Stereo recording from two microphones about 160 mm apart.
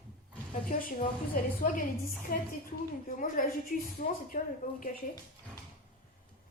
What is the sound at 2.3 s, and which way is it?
Speech, 65° left (ahead or behind).